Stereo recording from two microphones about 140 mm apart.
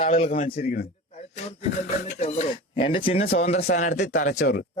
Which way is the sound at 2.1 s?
45° left (ahead or behind).